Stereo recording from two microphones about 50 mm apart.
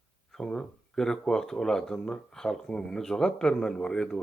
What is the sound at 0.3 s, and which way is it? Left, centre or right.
A man's voice, centre.